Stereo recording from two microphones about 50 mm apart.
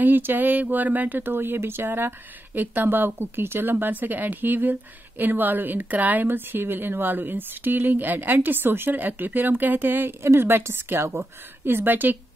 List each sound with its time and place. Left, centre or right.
0.0 s speech: right
6.2 s a woman's voice: right